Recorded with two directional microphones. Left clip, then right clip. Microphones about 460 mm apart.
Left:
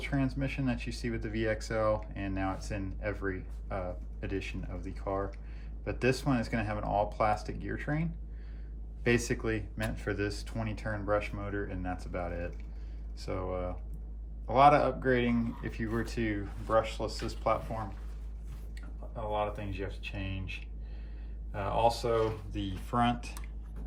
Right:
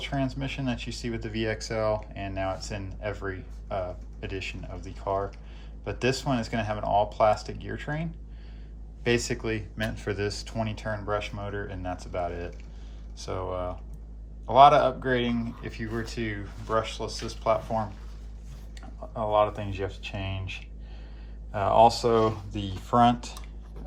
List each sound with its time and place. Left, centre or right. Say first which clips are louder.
0.0 s speech: right 3 dB; centre
9.0 s speech: right 3 dB; centre
19.3 s speech: right 10 dB; centre
21.5 s speech: right 9 dB; centre